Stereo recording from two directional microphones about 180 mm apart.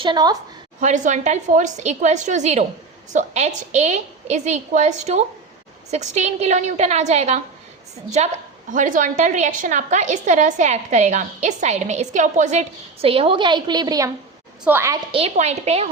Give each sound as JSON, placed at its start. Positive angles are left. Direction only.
{"t": 0.0, "sound": "a woman's voice", "side_deg": -25}
{"t": 0.8, "sound": "a woman's voice", "side_deg": -45}
{"t": 15.1, "sound": "a woman's voice", "side_deg": -35}